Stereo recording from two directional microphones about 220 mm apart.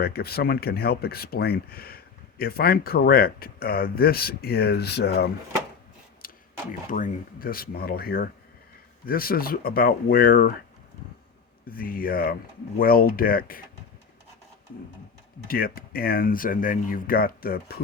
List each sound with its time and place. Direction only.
0.0 s speech: 45° left (ahead or behind)
6.2 s a sound: 40° left (ahead or behind)
6.9 s speech: 40° left (ahead or behind)
11.7 s speech: 40° left (ahead or behind)
15.4 s speech: 40° left (ahead or behind)